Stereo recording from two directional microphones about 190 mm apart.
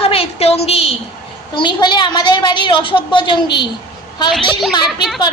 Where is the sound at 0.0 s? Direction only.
30° left (ahead or behind).